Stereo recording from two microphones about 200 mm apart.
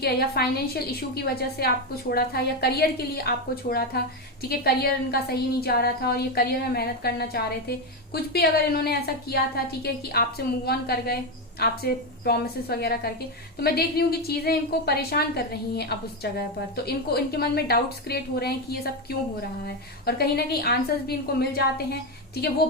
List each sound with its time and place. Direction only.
0.0 s a woman's voice: 50° left (ahead or behind)